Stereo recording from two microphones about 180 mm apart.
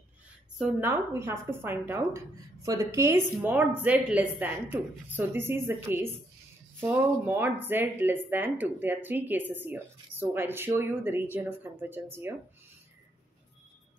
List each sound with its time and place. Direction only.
0.6 s speech: 10° right (ahead or behind)